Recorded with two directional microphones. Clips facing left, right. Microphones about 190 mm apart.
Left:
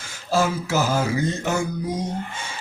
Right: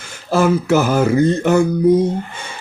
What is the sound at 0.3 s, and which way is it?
Speech, 60° right (ahead or behind).